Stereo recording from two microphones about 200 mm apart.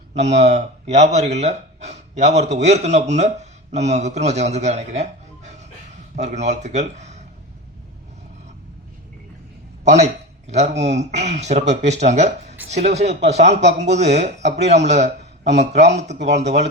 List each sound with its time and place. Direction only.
0.1 s a man's voice: 35° right (ahead or behind)
9.8 s speech: 35° right (ahead or behind)